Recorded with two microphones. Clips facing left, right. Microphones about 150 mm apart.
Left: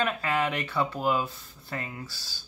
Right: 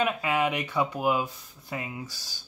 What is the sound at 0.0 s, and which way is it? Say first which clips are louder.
Speech: right 2 dB; 15° right (ahead or behind).